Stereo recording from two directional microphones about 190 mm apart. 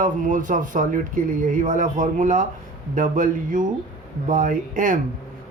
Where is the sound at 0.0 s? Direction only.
45° right (ahead or behind).